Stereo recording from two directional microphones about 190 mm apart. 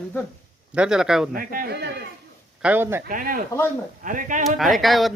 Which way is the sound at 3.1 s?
45° right (ahead or behind).